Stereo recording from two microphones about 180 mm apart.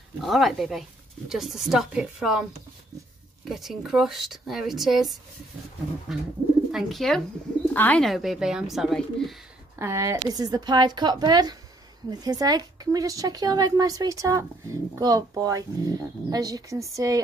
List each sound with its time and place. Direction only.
0.2 s speech: centre (ahead or behind)
3.4 s speech: centre (ahead or behind)
9.8 s a woman's voice: 15° right (ahead or behind)